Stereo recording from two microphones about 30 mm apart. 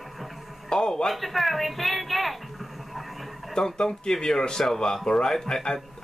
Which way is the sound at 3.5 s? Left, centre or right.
Left.